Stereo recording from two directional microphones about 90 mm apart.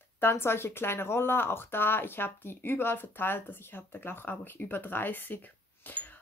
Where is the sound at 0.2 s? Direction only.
25° left (ahead or behind).